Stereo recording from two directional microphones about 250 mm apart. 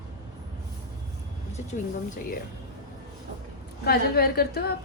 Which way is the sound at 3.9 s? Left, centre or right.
Left.